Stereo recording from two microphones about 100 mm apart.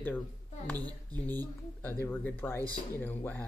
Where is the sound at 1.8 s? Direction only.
20° left (ahead or behind).